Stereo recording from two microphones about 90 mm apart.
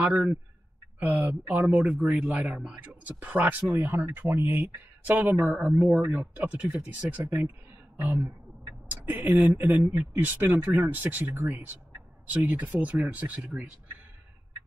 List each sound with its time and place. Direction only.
0.0 s speech: 15° right (ahead or behind)
1.5 s speech: 15° right (ahead or behind)